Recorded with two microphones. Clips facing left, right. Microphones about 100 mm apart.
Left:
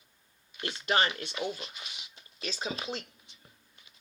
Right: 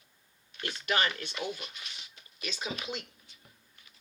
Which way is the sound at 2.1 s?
30° left (ahead or behind).